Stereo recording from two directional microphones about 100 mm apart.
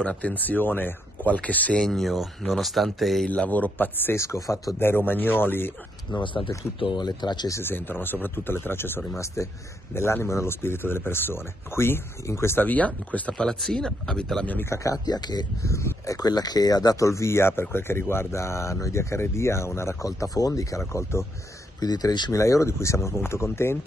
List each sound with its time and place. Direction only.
0.0 s speech: 15° left (ahead or behind)
3.3 s speech: 15° left (ahead or behind)
6.1 s speech: 55° left (ahead or behind)
7.4 s speech: 25° left (ahead or behind)
14.7 s speech: 35° left (ahead or behind)
15.6 s speech: 30° left (ahead or behind)
21.7 s speech: 40° left (ahead or behind)
22.3 s speech: 30° left (ahead or behind)